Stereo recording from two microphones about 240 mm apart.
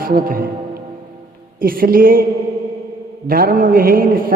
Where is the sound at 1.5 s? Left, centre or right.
Right.